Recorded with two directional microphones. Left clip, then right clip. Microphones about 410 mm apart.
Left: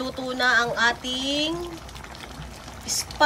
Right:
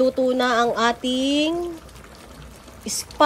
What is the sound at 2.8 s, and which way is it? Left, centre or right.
Speech, centre.